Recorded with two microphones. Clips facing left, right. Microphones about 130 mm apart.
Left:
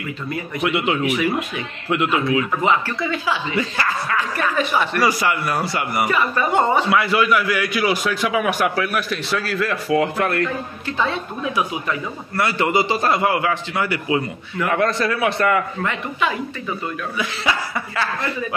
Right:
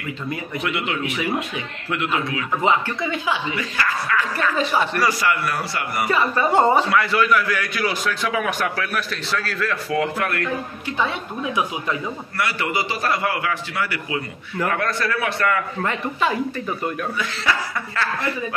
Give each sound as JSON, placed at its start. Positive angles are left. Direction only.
{"t": 0.6, "sound": "a man's voice", "side_deg": 20}
{"t": 1.0, "sound": "speech", "side_deg": -25}
{"t": 1.9, "sound": "a man's voice", "side_deg": 20}
{"t": 2.6, "sound": "speech", "side_deg": -20}
{"t": 3.5, "sound": "a man's voice", "side_deg": 30}
{"t": 4.6, "sound": "a man's voice", "side_deg": -30}
{"t": 5.0, "sound": "a man's voice", "side_deg": 20}
{"t": 6.0, "sound": "speech", "side_deg": -30}
{"t": 6.9, "sound": "a man's voice", "side_deg": 10}
{"t": 10.1, "sound": "a man's voice", "side_deg": 25}
{"t": 10.9, "sound": "a woman's voice", "side_deg": -15}
{"t": 12.4, "sound": "a man's voice", "side_deg": 25}
{"t": 15.8, "sound": "a man's voice", "side_deg": -35}
{"t": 17.2, "sound": "speech", "side_deg": 15}